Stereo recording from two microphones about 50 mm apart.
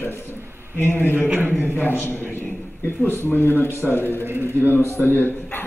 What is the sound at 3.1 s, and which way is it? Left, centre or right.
Speech, left.